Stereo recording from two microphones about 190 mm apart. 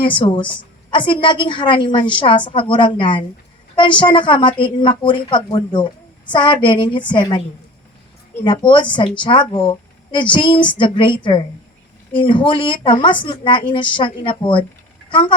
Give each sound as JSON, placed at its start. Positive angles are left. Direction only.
{"t": 0.0, "sound": "a woman's voice", "side_deg": 25}
{"t": 8.4, "sound": "a woman's voice", "side_deg": 25}